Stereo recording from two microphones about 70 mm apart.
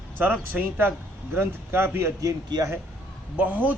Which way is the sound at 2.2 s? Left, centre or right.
Right.